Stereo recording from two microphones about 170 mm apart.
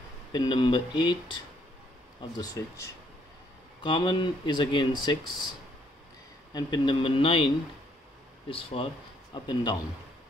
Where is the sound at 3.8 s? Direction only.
30° left (ahead or behind).